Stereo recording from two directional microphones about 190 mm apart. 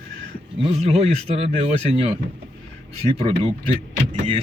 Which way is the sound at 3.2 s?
30° right (ahead or behind).